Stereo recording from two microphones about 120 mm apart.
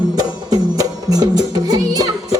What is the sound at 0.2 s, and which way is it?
Music, 35° right (ahead or behind).